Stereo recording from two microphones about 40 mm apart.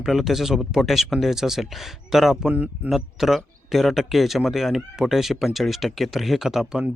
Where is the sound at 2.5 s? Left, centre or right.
Right.